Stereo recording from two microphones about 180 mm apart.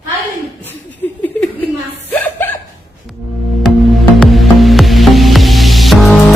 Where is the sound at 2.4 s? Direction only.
10° left (ahead or behind).